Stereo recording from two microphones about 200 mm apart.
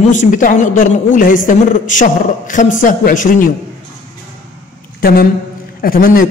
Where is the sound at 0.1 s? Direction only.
40° left (ahead or behind).